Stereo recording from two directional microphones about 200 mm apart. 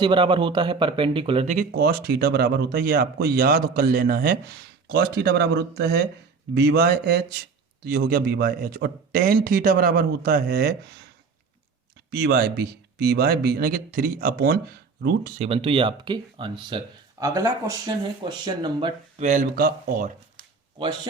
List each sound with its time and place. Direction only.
0.0 s speech: 25° right (ahead or behind)
1.5 s speech: 50° right (ahead or behind)
12.1 s speech: 50° right (ahead or behind)
15.4 s speech: 30° right (ahead or behind)
19.2 s speech: 40° right (ahead or behind)
20.7 s speech: 25° right (ahead or behind)